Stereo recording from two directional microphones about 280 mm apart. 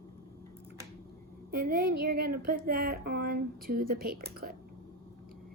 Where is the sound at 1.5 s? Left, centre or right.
Right.